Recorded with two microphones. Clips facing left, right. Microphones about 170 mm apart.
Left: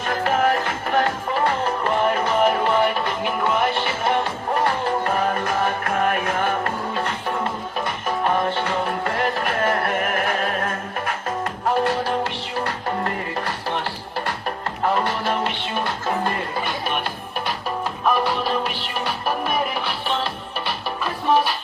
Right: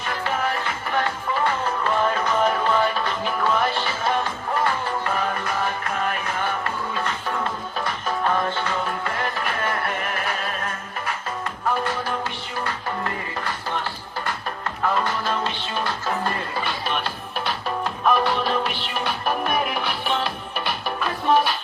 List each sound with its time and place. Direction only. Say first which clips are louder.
0.0 s music: left 5 dB; 45° left (ahead or behind)
7.3 s music: left 2 dB; 25° left (ahead or behind); by 11.2 s 50° left (ahead or behind)
11.6 s music: left 4 dB; 35° left (ahead or behind)
14.8 s music: left 2 dB; 25° left (ahead or behind)
18.0 s music: even; 5° left (ahead or behind)